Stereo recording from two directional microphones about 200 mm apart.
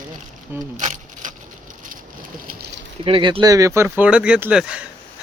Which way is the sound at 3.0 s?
25° right (ahead or behind).